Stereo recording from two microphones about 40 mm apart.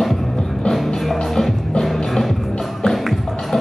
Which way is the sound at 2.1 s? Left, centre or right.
Centre.